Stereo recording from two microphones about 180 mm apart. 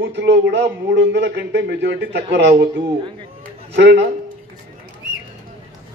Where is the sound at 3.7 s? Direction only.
90° right.